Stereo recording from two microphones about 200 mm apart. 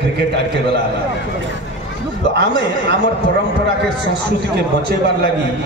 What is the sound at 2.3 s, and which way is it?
Speech, 55° right (ahead or behind).